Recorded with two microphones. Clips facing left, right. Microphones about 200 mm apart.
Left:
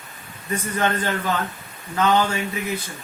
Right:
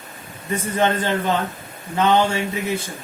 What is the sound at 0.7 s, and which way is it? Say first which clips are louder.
A man's voice: right 4 dB; 25° right (ahead or behind).